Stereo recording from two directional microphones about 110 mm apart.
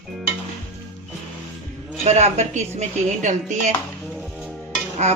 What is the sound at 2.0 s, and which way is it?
Speech, 85° right.